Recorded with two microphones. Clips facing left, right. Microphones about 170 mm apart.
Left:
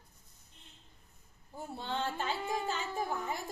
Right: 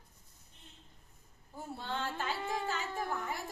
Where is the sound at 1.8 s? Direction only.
20° left (ahead or behind).